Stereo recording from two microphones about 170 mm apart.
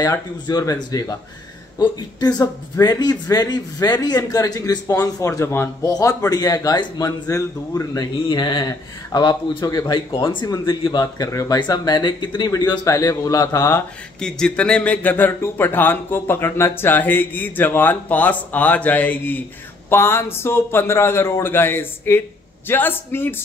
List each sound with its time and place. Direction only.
0.0 s speech: 20° left (ahead or behind)
14.2 s speech: 5° left (ahead or behind)